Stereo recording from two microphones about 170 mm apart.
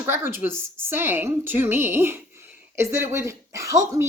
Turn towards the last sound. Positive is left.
turn(degrees=-20)  # may be behind; listen again after turning